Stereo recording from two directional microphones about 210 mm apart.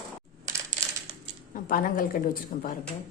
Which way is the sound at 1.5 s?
40° left (ahead or behind).